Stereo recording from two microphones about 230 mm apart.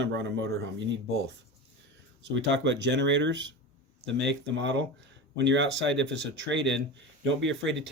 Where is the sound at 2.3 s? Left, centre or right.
Right.